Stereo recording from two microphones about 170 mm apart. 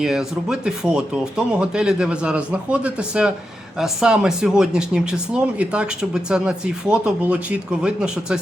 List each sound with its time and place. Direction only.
0.0 s speech: 5° right (ahead or behind)